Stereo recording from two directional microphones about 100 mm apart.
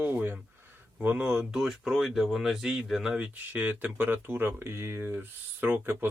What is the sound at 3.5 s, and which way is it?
Speech, 20° right (ahead or behind).